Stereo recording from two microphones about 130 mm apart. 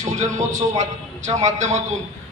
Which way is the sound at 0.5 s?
65° right (ahead or behind).